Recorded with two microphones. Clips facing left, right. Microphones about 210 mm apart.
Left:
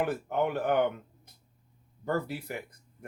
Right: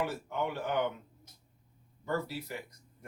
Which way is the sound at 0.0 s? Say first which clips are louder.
Left 5 dB; 55° left (ahead or behind).